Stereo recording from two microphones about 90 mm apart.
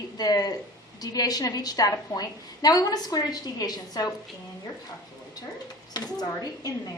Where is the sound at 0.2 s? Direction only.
45° left (ahead or behind).